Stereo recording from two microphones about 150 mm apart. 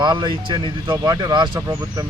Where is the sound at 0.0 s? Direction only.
30° right (ahead or behind).